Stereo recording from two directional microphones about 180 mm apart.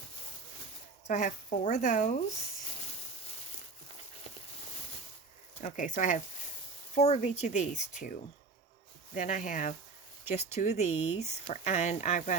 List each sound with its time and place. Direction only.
1.0 s speech: 45° left (ahead or behind)
5.5 s speech: 45° left (ahead or behind)